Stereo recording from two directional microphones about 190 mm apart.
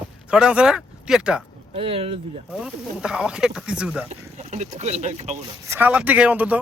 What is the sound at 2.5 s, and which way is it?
Speech, 5° right (ahead or behind).